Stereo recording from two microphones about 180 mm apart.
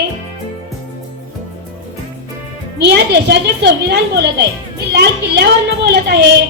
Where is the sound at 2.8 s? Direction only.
70° right (ahead or behind).